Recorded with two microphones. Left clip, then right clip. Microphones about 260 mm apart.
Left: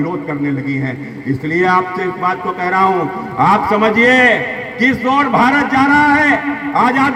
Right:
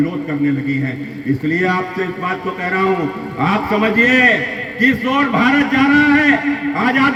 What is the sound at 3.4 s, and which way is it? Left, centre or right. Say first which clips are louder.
A man's voice: left 5 dB; left.